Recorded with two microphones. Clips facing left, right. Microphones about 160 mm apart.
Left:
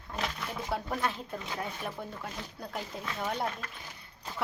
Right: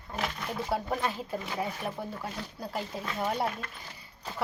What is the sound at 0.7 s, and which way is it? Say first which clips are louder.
Speech: right 1 dB; centre (ahead or behind).